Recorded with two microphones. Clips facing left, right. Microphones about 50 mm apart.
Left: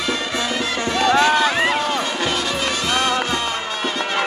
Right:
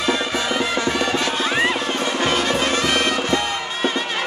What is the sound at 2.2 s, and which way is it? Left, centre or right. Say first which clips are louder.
Music: right 2 dB; right.